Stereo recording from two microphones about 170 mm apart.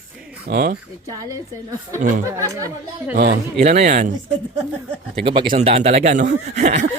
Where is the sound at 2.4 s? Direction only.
20° right (ahead or behind).